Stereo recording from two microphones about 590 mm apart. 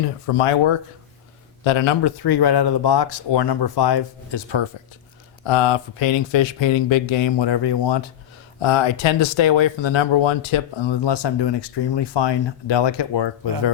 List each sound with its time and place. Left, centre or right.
0.3 s speech: left